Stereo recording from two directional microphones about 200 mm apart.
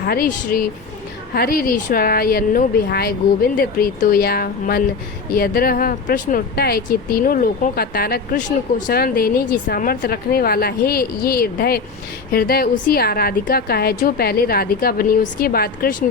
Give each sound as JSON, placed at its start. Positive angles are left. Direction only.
{"t": 0.1, "sound": "speech", "side_deg": 45}